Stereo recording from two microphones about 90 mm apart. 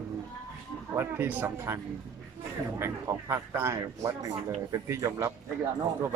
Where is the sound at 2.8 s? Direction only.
30° right (ahead or behind).